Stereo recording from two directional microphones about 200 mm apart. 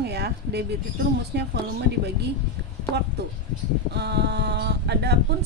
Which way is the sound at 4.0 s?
55° right (ahead or behind).